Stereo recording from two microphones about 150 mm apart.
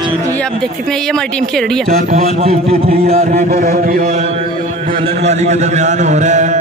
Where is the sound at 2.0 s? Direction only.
50° right (ahead or behind).